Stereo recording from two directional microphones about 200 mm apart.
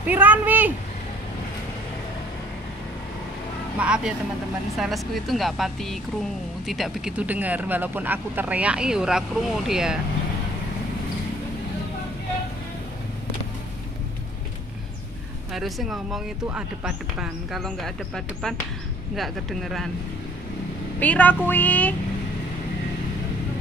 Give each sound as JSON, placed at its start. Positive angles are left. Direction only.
{"t": 0.0, "sound": "speech", "side_deg": -10}
{"t": 3.7, "sound": "speech", "side_deg": -5}
{"t": 15.5, "sound": "speech", "side_deg": 0}
{"t": 21.0, "sound": "a sound", "side_deg": 10}